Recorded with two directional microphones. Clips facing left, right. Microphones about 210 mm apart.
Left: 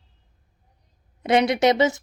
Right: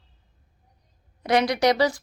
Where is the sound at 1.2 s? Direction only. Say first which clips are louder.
Left 2 dB; 25° left (ahead or behind).